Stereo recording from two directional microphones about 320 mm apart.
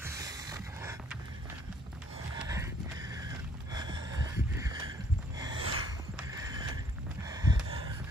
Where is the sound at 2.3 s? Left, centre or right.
Centre.